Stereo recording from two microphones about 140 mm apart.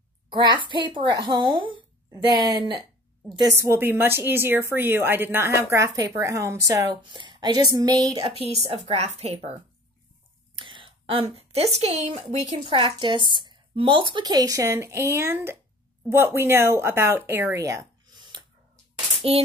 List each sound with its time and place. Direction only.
0.3 s a woman's voice: 30° right (ahead or behind)
3.5 s a woman's voice: 20° right (ahead or behind)
8.3 s a woman's voice: 45° right (ahead or behind)
10.5 s a woman's voice: 35° right (ahead or behind)
12.5 s a woman's voice: 40° right (ahead or behind)
19.2 s a woman's voice: 45° right (ahead or behind)